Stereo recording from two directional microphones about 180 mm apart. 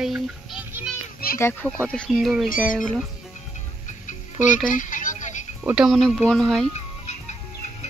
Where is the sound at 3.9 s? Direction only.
45° left (ahead or behind).